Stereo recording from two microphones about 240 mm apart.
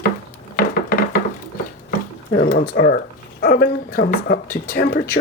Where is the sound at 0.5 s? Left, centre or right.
Left.